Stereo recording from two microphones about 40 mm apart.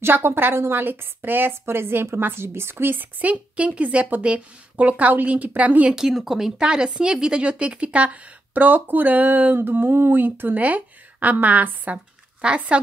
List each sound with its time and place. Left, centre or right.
0.0 s a woman's voice: right
3.2 s a woman's voice: right
5.9 s speech: centre
6.6 s a woman's voice: right
9.6 s speech: right
10.6 s a woman's voice: right
12.4 s speech: right